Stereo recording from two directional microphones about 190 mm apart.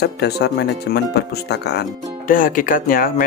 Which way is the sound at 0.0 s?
60° left (ahead or behind).